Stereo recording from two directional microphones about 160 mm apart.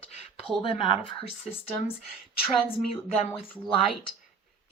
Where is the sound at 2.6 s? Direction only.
35° left (ahead or behind).